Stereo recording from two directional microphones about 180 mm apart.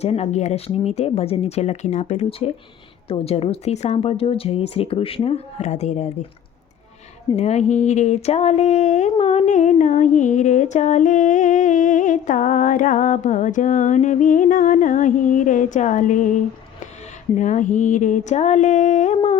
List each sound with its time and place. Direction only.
0.0 s speech: 35° left (ahead or behind)
7.3 s speech: 40° left (ahead or behind)